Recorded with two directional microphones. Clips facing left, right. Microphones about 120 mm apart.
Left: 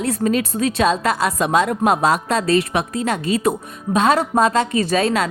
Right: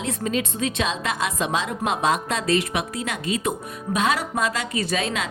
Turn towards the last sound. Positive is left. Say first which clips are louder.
# left 8 dB
turn(degrees=40)  # may be behind; listen again after turning